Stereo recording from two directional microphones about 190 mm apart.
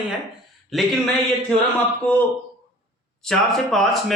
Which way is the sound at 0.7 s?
Centre (ahead or behind).